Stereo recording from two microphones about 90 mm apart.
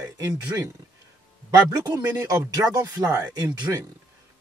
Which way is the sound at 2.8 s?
35° right (ahead or behind).